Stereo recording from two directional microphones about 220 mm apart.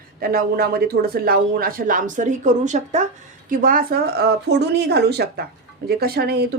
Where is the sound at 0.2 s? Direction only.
40° right (ahead or behind).